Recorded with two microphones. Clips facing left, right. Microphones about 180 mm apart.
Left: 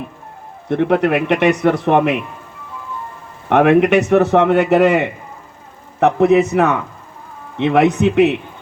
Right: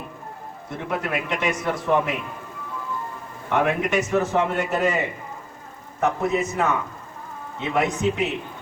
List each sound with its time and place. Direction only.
0.7 s a man's voice: 70° left (ahead or behind)
3.5 s a man's voice: 70° left (ahead or behind)